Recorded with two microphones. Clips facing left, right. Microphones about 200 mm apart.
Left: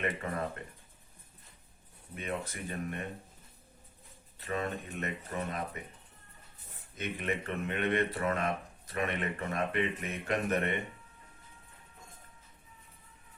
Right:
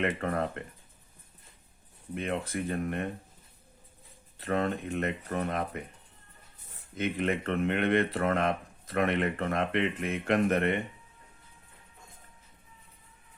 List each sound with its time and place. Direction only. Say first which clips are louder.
0.0 s speech: right 5 dB; 65° right (ahead or behind)
2.2 s speech: right 5 dB; 55° right (ahead or behind)
4.4 s speech: right 6 dB; 55° right (ahead or behind)
6.9 s speech: right 6 dB; 55° right (ahead or behind)